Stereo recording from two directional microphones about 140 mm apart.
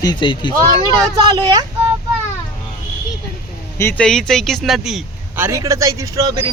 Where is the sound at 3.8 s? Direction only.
15° left (ahead or behind).